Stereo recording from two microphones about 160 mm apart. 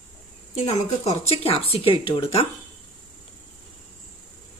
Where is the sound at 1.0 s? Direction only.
40° left (ahead or behind).